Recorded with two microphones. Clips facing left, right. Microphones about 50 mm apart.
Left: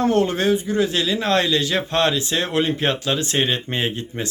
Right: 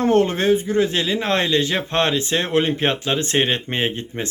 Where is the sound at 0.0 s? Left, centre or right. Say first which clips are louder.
Right 1 dB; right.